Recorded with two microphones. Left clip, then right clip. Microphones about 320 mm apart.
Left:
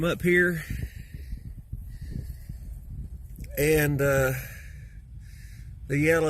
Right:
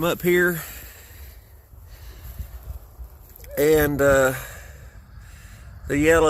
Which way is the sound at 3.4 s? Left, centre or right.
Centre.